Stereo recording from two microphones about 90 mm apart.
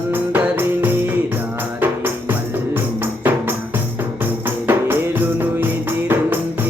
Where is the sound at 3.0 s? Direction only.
25° right (ahead or behind).